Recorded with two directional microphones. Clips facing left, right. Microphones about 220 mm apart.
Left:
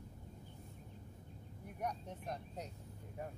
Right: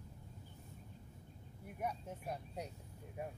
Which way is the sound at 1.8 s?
5° right (ahead or behind).